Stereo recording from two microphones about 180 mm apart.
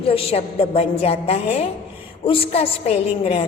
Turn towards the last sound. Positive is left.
turn(degrees=35)  # may be behind; listen again after turning